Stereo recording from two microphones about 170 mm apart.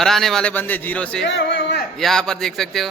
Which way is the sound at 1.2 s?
90° left.